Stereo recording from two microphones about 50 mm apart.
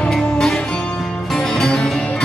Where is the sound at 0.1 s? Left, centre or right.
Centre.